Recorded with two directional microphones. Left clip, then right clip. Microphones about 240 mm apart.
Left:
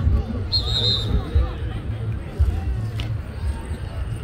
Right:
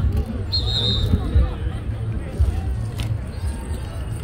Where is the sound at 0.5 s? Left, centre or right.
Centre.